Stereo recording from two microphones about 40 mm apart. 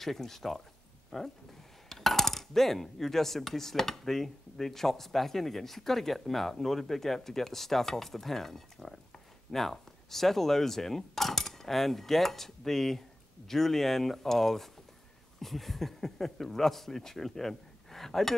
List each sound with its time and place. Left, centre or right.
0.0 s speech: centre